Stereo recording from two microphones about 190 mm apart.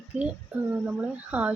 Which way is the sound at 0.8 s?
10° right (ahead or behind).